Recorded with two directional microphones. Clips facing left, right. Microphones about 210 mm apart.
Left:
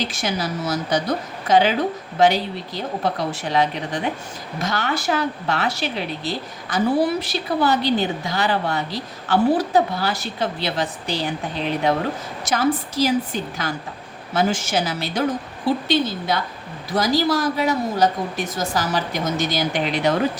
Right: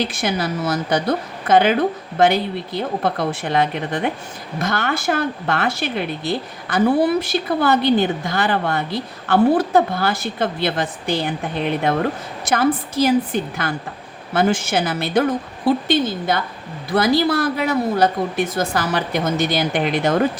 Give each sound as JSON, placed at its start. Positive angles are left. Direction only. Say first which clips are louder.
{"t": 0.0, "sound": "a woman's voice", "louder": "right 3 dB", "side_deg": -55}